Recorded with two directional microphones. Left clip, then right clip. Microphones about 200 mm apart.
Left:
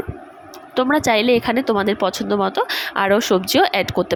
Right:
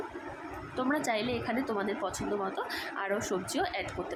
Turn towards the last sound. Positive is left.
turn(degrees=50)  # may be behind; listen again after turning